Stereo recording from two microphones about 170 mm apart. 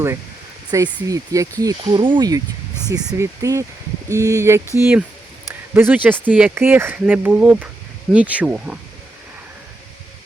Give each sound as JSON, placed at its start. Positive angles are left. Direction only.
{"t": 1.0, "sound": "speech", "side_deg": -20}